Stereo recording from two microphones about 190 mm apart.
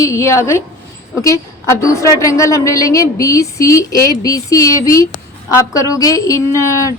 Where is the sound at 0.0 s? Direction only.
15° left (ahead or behind).